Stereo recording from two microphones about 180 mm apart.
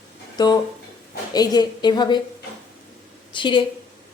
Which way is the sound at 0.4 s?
25° left (ahead or behind).